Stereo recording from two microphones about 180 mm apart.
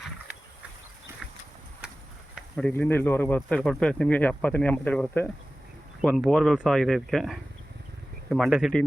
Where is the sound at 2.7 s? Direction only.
10° left (ahead or behind).